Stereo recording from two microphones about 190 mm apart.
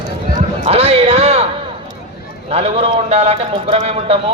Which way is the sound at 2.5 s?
30° right (ahead or behind).